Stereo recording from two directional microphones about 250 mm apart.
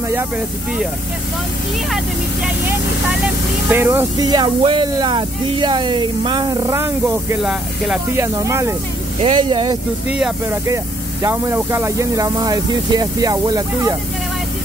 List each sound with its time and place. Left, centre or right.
3.6 s speech: centre
10.1 s speech: centre